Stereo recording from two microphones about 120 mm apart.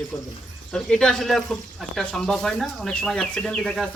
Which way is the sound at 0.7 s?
5° left (ahead or behind).